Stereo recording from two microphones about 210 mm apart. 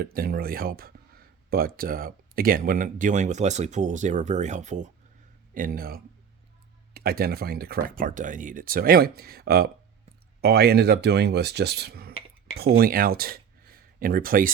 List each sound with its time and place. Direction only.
0.0 s speech: 45° right (ahead or behind)